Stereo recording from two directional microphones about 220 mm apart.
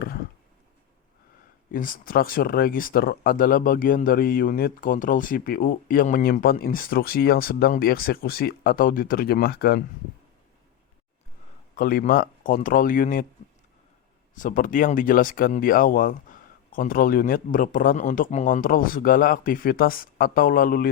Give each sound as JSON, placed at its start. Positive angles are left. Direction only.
{"t": 1.7, "sound": "speech", "side_deg": 40}
{"t": 11.7, "sound": "speech", "side_deg": 40}
{"t": 14.3, "sound": "speech", "side_deg": 35}